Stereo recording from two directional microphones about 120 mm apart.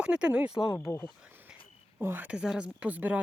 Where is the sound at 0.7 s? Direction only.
25° left (ahead or behind).